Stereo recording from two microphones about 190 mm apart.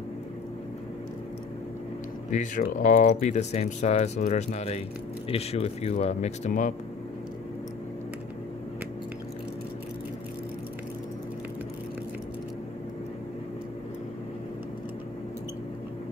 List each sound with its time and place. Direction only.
2.6 s speech: 45° left (ahead or behind)